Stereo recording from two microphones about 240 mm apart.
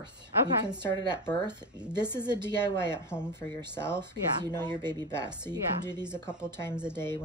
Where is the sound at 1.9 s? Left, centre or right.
Centre.